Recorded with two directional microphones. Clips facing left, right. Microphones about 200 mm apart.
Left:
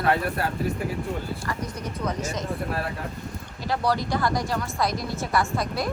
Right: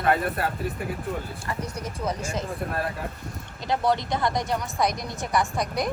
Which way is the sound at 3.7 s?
20° right (ahead or behind).